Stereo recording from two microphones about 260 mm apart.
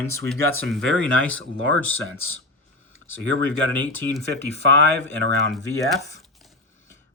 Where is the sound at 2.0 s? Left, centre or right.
Left.